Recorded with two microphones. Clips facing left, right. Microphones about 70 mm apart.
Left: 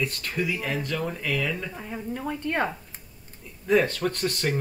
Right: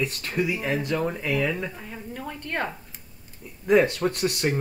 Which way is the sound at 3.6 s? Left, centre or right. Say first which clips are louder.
Right 3 dB; centre.